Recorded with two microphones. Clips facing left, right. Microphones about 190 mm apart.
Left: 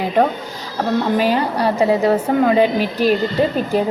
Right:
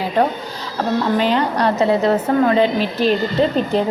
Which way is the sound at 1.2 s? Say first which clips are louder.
Even; 10° left (ahead or behind).